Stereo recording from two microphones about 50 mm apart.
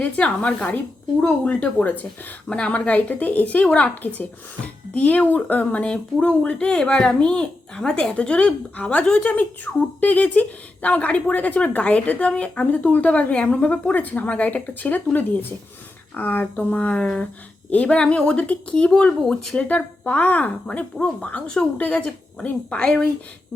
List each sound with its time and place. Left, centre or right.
0.0 s a woman's voice: left
8.7 s a woman's voice: left
9.0 s a woman's voice: centre
9.3 s a woman's voice: left